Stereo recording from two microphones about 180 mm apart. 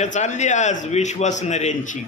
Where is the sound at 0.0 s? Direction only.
40° left (ahead or behind).